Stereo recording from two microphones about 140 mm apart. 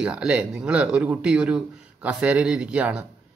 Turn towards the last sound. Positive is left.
turn(degrees=-10)  # may be behind; listen again after turning